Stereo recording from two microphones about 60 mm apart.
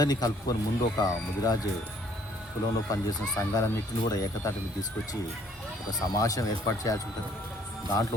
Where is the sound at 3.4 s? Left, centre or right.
Left.